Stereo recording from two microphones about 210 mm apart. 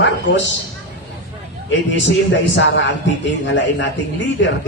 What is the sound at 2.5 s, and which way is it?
A man's voice, 60° left (ahead or behind).